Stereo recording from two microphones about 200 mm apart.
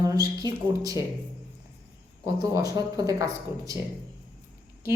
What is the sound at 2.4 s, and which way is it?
Speech, 20° right (ahead or behind).